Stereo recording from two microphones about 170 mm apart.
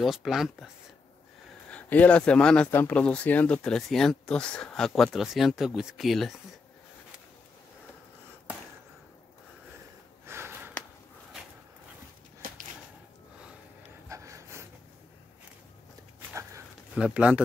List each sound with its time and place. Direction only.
0.0 s speech: centre (ahead or behind)
1.7 s speech: 10° left (ahead or behind)
10.2 s a sound: 15° right (ahead or behind)
12.4 s a sound: 55° right (ahead or behind)
14.0 s snort: 20° right (ahead or behind)
16.9 s speech: 5° right (ahead or behind)